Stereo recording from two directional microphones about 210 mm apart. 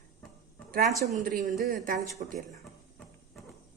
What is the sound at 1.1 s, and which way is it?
Speech, 40° right (ahead or behind).